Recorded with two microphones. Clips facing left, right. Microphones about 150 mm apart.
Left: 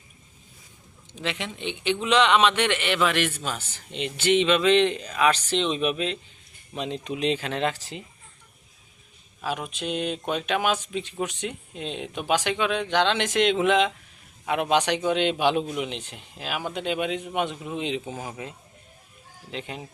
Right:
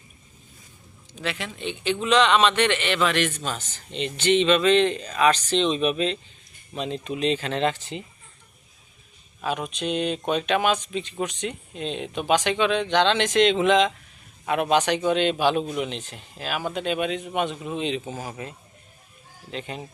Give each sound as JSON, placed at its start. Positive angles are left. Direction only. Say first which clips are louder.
{"t": 1.1, "sound": "a man's voice", "louder": "even", "side_deg": 20}
{"t": 9.4, "sound": "a man's voice", "louder": "right 3 dB", "side_deg": 5}